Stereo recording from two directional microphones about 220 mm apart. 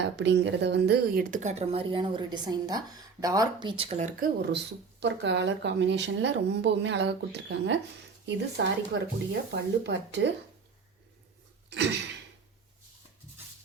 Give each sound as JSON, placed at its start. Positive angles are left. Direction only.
{"t": 0.0, "sound": "speech", "side_deg": -50}
{"t": 4.2, "sound": "speech", "side_deg": -50}
{"t": 11.7, "sound": "a sound", "side_deg": -50}